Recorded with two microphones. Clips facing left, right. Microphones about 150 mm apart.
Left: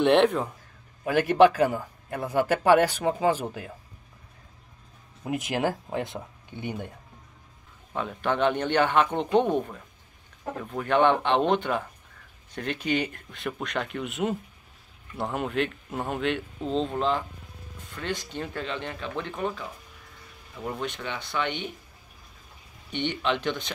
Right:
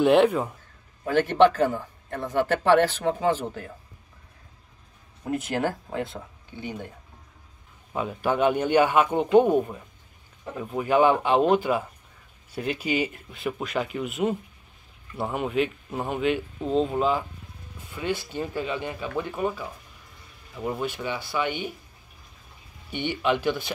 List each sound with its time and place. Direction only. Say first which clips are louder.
0.0 s speech: right 2 dB; 5° right (ahead or behind)
1.0 s speech: even; 10° left (ahead or behind)
5.2 s speech: even; 15° left (ahead or behind)
7.9 s speech: right 2 dB; 10° right (ahead or behind)
22.8 s speech: right 2 dB; 5° right (ahead or behind)